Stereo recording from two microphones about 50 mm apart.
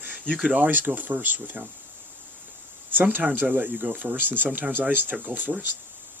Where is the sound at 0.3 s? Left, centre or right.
Right.